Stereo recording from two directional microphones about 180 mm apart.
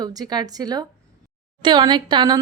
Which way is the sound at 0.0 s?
20° right (ahead or behind).